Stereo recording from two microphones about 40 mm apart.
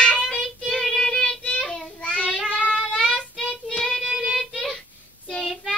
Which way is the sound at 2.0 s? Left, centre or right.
Left.